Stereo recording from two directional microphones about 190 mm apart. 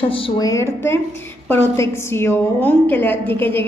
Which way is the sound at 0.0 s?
30° left (ahead or behind).